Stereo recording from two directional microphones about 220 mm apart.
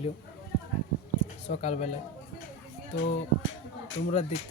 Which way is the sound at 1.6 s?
30° left (ahead or behind).